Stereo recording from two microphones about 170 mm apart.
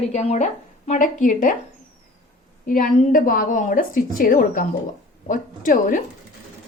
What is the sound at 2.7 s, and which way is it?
A woman's voice, 55° left (ahead or behind).